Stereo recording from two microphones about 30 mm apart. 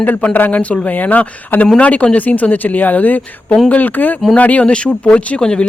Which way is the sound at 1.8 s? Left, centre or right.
Left.